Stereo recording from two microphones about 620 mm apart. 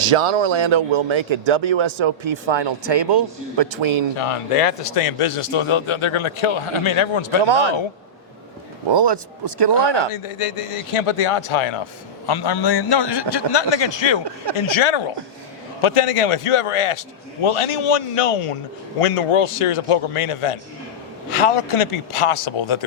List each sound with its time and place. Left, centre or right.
0.0 s a man's voice: right
4.2 s a man's voice: left
8.9 s speech: right
10.1 s a man's voice: left
12.2 s a man's voice: left